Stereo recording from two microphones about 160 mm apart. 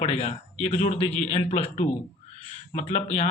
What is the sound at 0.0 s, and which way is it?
Speech, 40° left (ahead or behind).